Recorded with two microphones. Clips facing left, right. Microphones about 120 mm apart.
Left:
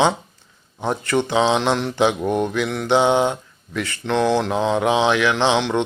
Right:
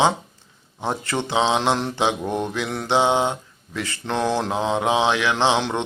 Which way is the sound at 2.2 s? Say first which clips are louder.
Left 4 dB; 15° left (ahead or behind).